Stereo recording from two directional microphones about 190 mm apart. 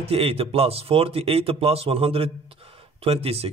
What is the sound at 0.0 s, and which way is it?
A man's voice, 30° right (ahead or behind).